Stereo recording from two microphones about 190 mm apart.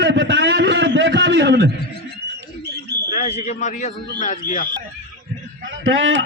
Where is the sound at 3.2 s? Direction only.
35° left (ahead or behind).